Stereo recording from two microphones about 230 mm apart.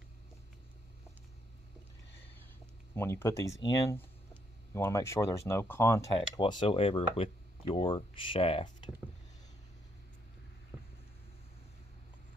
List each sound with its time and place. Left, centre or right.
3.0 s speech: centre